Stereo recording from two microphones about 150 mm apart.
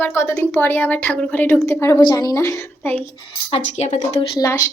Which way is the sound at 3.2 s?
45° left (ahead or behind).